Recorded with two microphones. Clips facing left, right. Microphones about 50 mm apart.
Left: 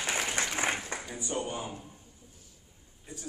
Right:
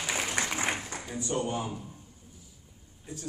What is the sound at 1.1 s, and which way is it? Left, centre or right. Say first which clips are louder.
Speech: right 5 dB; centre.